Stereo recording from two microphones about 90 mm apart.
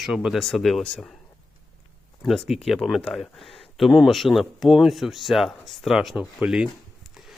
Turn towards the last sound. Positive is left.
turn(degrees=-10)  # may be behind; listen again after turning